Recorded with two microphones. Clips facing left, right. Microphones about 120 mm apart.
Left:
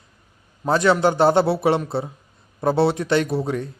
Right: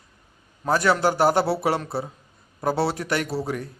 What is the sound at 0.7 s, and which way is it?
A man's voice, 20° left (ahead or behind).